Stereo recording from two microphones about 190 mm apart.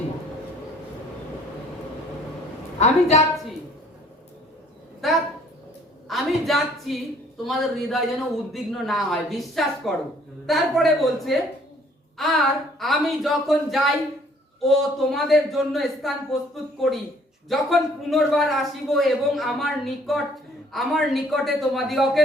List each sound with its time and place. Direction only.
2.7 s a woman's voice: 35° left (ahead or behind)
5.0 s a woman's voice: centre (ahead or behind)
6.1 s a sound: centre (ahead or behind)
7.4 s a man's voice: centre (ahead or behind)
17.5 s a man's voice: centre (ahead or behind)